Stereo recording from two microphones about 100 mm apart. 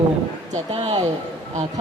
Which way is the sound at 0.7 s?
65° right (ahead or behind).